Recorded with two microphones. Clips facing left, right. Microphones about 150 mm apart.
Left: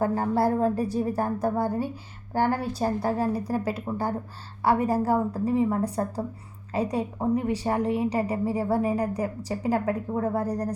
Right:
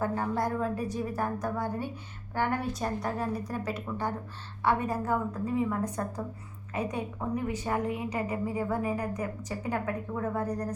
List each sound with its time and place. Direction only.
0.0 s a woman's voice: 35° left (ahead or behind)